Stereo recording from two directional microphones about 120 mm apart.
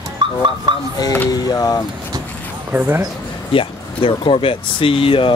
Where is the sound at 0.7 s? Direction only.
40° right (ahead or behind).